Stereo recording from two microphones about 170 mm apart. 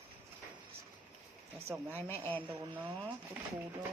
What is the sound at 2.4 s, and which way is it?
Speech, 30° right (ahead or behind).